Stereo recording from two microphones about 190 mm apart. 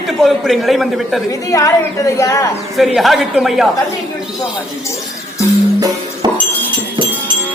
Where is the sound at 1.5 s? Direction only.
15° left (ahead or behind).